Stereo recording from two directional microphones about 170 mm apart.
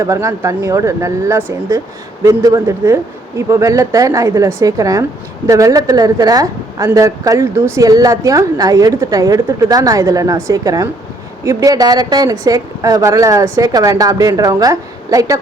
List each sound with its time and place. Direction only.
0.0 s a woman's voice: 15° right (ahead or behind)